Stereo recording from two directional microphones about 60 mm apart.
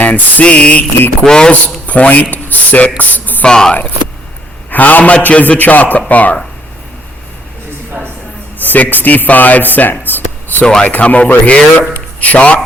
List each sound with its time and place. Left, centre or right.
0.0 s a man's voice: left
1.9 s speech: left
3.0 s music: left
3.4 s a man's voice: centre
4.7 s speech: left
8.6 s speech: left
10.1 s a sound: left
10.6 s a man's voice: centre
10.8 s a man's voice: left